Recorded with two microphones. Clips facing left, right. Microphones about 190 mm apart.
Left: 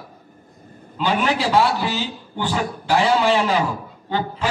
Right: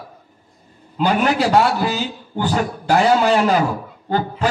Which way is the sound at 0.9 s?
45° right (ahead or behind).